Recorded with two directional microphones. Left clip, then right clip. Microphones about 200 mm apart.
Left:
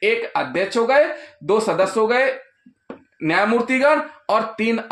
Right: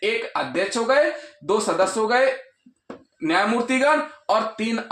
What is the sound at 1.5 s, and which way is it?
Speech, 40° left (ahead or behind).